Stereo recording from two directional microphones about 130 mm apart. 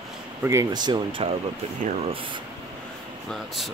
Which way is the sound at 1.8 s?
60° right (ahead or behind).